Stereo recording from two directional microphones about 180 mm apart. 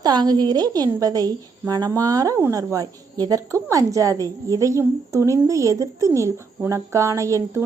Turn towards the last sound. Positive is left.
turn(degrees=-15)  # may be behind; listen again after turning